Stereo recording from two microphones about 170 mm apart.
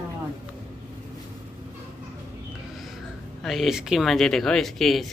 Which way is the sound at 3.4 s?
Centre (ahead or behind).